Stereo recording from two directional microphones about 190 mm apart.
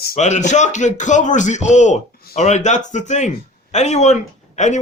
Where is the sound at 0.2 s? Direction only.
40° left (ahead or behind).